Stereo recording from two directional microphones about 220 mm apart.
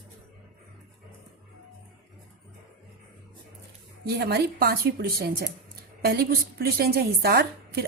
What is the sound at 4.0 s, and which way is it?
Speech, 45° right (ahead or behind).